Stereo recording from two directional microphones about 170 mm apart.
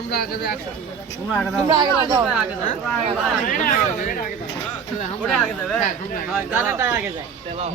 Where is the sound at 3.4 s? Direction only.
55° left (ahead or behind).